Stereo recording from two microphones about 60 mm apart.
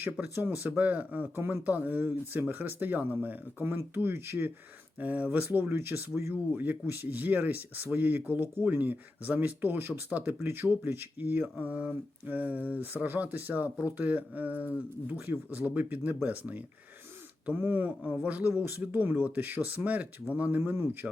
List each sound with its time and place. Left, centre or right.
0.0 s speech: right
1.4 s speech: right
1.6 s speech: right
3.6 s speech: right
4.9 s speech: right
5.5 s speech: right
6.3 s speech: right
10.4 s speech: right
17.8 s speech: right
18.3 s speech: right
21.0 s speech: centre